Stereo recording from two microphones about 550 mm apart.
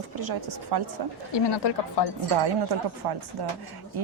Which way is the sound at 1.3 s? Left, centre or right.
Left.